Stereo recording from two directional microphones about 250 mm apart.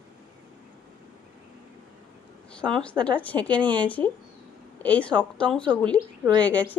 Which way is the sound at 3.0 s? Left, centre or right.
Centre.